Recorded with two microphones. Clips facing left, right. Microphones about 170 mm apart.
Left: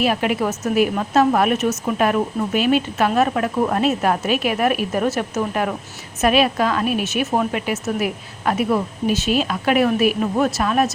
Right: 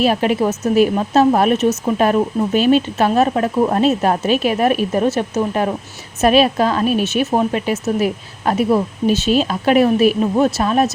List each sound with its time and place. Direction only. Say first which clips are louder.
0.0 s a woman's voice: right 4 dB; 30° right (ahead or behind)